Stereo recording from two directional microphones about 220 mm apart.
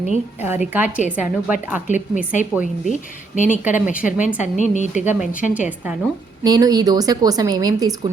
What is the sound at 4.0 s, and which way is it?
A woman's voice, 35° left (ahead or behind).